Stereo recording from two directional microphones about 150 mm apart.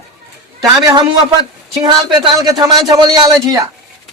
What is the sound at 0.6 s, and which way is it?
A man's voice, 20° right (ahead or behind).